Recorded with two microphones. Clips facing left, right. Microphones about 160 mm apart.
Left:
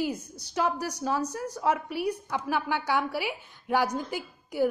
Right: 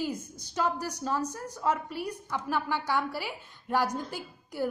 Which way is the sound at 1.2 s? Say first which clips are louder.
Left 2 dB; 70° left (ahead or behind).